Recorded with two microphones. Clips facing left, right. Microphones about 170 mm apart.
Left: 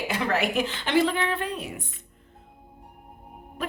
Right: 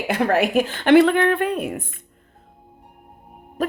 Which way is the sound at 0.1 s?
50° right (ahead or behind).